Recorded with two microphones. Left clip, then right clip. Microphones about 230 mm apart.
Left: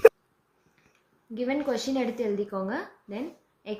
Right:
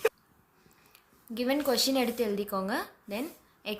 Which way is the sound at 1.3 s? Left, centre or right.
Right.